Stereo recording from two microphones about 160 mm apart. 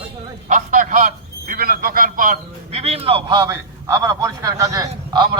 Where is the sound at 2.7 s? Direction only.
40° right (ahead or behind).